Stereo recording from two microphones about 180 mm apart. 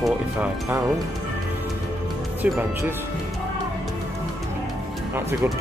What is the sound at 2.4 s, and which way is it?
Speech, 10° right (ahead or behind).